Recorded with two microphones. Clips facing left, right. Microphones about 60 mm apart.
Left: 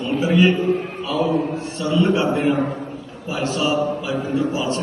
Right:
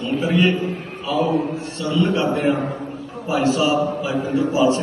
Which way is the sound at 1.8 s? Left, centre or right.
Centre.